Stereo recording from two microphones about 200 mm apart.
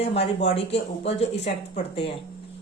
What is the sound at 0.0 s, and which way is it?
Speech, 30° left (ahead or behind).